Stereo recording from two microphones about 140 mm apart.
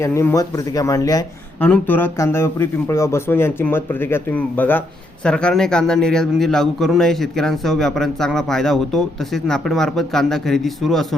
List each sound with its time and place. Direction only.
0.0 s speech: 20° left (ahead or behind)
1.6 s speech: 15° left (ahead or behind)